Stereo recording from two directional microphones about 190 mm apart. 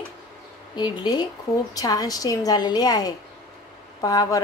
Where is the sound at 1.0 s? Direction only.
20° left (ahead or behind).